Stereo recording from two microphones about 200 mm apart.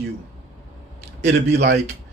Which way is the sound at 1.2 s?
55° right (ahead or behind).